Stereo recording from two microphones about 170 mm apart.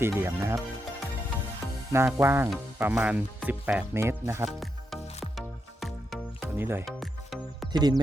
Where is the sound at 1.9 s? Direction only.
15° right (ahead or behind).